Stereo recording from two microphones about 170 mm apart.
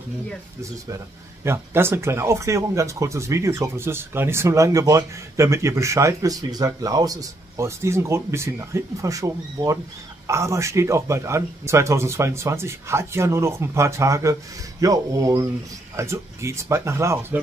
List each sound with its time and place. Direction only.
1.4 s speech: 15° right (ahead or behind)